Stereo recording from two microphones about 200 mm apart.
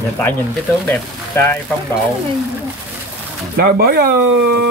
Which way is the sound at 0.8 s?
10° left (ahead or behind).